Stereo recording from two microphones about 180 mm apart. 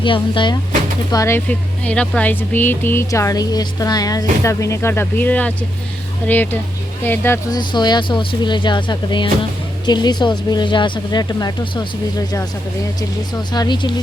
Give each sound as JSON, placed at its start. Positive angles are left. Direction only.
{"t": 0.0, "sound": "speech", "side_deg": 25}
{"t": 1.1, "sound": "speech", "side_deg": 15}
{"t": 7.6, "sound": "speech", "side_deg": 25}
{"t": 13.5, "sound": "speech", "side_deg": 25}